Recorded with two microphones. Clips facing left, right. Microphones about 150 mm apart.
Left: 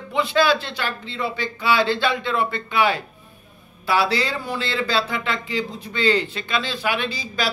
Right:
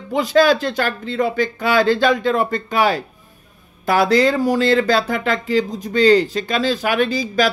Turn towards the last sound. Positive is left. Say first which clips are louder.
# right 9 dB
turn(degrees=-45)  # may be behind; listen again after turning